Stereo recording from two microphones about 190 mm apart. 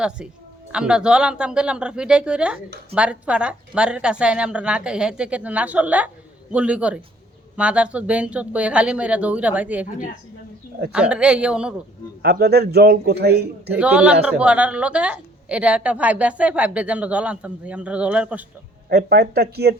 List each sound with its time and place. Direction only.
0.7 s a woman's voice: 5° right (ahead or behind)
10.9 s a woman's voice: 5° right (ahead or behind)
12.2 s a man's voice: 55° right (ahead or behind)
13.7 s a woman's voice: 5° right (ahead or behind)
18.9 s a man's voice: 55° right (ahead or behind)